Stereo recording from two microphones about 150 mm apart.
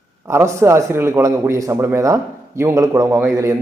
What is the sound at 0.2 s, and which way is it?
A man's voice, 15° right (ahead or behind).